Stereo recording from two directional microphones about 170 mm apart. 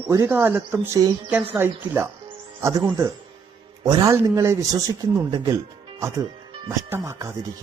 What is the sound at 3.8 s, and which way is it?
Speech, 20° right (ahead or behind).